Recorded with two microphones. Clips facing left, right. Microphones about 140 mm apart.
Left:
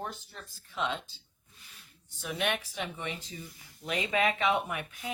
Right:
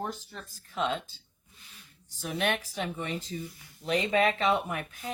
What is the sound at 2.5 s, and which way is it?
Speech, 40° right (ahead or behind).